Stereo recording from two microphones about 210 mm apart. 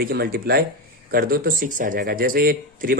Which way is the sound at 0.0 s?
45° right (ahead or behind).